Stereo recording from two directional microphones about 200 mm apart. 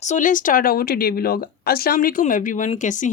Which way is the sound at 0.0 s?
40° left (ahead or behind).